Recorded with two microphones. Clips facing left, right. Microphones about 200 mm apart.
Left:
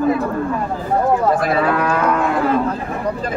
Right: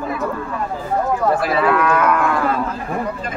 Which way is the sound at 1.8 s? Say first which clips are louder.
Right 1 dB; 30° left (ahead or behind).